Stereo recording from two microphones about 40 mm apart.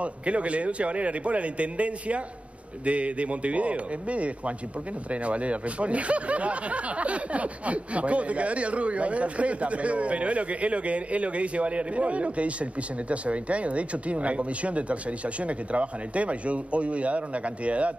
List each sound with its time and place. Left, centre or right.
0.0 s speech: right